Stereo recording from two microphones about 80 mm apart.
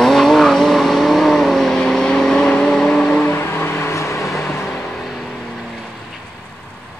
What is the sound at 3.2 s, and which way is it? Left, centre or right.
Music, left.